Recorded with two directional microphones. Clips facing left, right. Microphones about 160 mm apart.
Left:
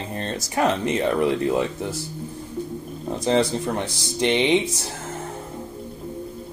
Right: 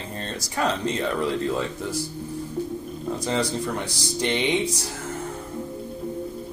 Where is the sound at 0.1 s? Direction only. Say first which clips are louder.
Left 4 dB; 20° left (ahead or behind).